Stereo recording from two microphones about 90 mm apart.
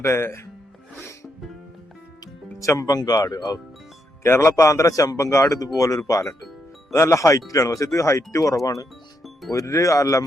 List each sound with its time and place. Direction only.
0.0 s speech: 30° left (ahead or behind)
0.9 s music: 30° left (ahead or behind)
2.2 s speech: 35° left (ahead or behind)